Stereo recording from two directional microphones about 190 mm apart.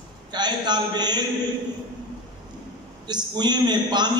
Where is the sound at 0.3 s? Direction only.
20° right (ahead or behind).